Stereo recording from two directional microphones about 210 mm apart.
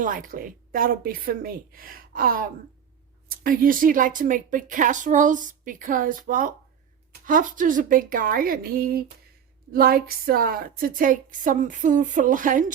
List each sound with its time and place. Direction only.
0.0 s a woman's voice: 40° right (ahead or behind)